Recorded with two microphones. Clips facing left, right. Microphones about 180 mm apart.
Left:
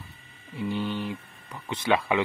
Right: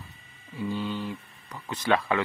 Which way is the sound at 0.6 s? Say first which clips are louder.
Left 1 dB; 20° left (ahead or behind).